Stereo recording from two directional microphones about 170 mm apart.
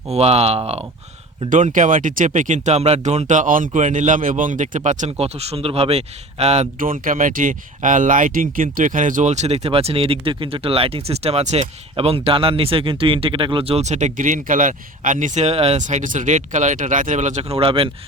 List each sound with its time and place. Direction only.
0.1 s speech: 35° right (ahead or behind)
1.5 s speech: 50° right (ahead or behind)
6.7 s speech: 55° right (ahead or behind); by 17.9 s 35° right (ahead or behind)